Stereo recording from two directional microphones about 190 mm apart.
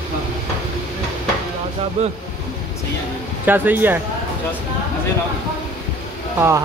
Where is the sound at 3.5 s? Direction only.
10° right (ahead or behind).